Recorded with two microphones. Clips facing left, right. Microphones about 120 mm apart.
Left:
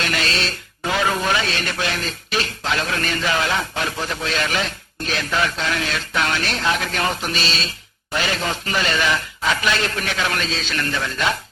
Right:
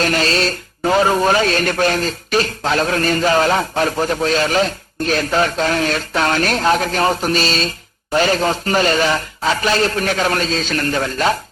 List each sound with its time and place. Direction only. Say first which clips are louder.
0.0 s speech: right 7 dB; 40° right (ahead or behind)